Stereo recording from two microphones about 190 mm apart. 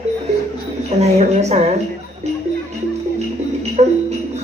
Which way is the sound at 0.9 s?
35° right (ahead or behind).